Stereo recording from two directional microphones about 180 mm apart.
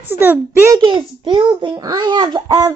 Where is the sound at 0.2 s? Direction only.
10° right (ahead or behind).